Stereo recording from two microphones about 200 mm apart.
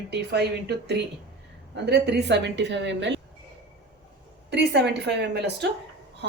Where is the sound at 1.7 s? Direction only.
60° right (ahead or behind).